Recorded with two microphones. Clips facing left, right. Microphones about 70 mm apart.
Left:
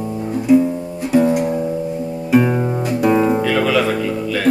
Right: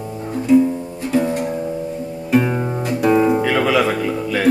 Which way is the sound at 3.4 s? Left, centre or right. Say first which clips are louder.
Even; centre.